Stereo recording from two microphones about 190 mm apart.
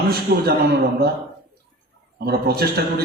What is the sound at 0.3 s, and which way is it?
Speech, 60° right (ahead or behind).